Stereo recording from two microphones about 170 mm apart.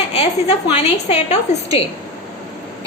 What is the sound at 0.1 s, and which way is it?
A woman's voice, 40° left (ahead or behind).